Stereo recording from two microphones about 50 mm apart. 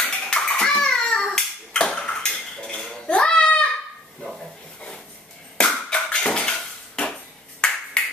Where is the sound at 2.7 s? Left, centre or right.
Centre.